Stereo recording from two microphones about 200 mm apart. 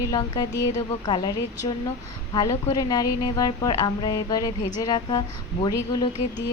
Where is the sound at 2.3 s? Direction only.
20° left (ahead or behind).